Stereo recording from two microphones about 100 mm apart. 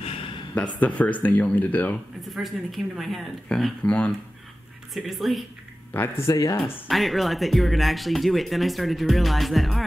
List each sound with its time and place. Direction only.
0.7 s speech: 15° left (ahead or behind)
2.3 s speech: centre (ahead or behind)
4.9 s speech: centre (ahead or behind)
5.9 s speech: 25° left (ahead or behind)
6.6 s speech: centre (ahead or behind)